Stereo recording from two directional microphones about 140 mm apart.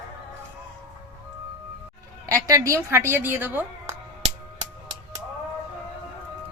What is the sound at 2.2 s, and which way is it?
A woman's voice, 25° right (ahead or behind).